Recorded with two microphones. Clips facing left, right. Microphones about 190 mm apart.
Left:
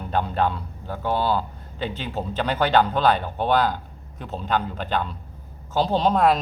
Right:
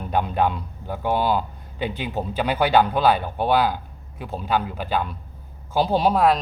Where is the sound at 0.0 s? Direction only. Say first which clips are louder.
Right 1 dB; 15° right (ahead or behind).